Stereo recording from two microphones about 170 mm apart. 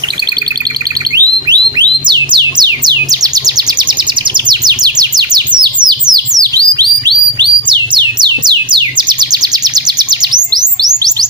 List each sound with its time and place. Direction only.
1.1 s music: 25° right (ahead or behind)
4.4 s bird: 25° right (ahead or behind)
7.3 s music: 25° right (ahead or behind)